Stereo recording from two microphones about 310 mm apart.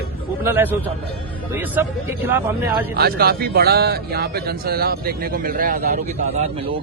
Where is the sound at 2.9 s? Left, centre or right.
Right.